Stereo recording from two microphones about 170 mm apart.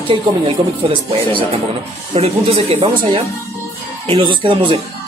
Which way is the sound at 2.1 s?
35° right (ahead or behind).